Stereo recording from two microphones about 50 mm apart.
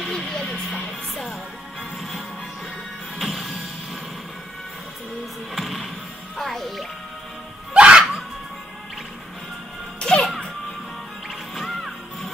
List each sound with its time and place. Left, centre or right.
0.1 s music: centre
3.2 s music: centre
5.5 s music: centre
7.7 s music: right
9.9 s music: centre
11.5 s music: centre